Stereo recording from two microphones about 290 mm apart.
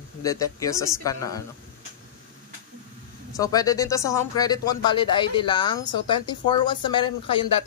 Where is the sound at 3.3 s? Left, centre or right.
Centre.